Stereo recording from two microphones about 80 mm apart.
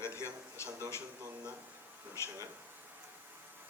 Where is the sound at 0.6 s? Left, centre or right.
Left.